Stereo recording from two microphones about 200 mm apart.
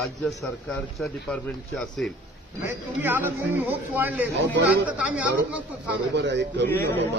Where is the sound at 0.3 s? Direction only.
Centre (ahead or behind).